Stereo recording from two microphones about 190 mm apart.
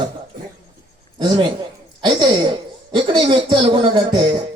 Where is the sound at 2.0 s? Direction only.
25° right (ahead or behind).